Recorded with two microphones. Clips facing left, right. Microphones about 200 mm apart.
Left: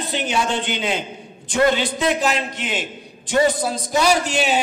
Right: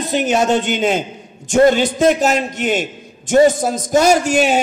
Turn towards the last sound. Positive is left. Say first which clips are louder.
# right 5 dB
turn(degrees=-45)  # may be behind; listen again after turning